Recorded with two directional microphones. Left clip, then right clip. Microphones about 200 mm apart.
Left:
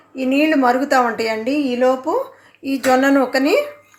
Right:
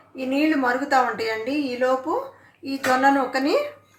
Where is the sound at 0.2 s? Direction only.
50° left (ahead or behind).